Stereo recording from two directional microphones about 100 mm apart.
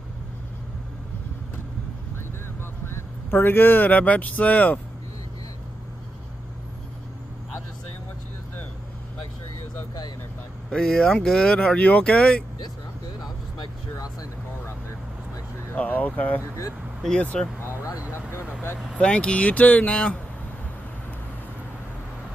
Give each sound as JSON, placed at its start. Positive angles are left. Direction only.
{"t": 2.9, "sound": "speech", "side_deg": 25}
{"t": 10.7, "sound": "speech", "side_deg": 10}
{"t": 13.2, "sound": "vehicle", "side_deg": 40}
{"t": 15.7, "sound": "speech", "side_deg": 15}
{"t": 18.3, "sound": "speech", "side_deg": 25}
{"t": 18.9, "sound": "speech", "side_deg": 10}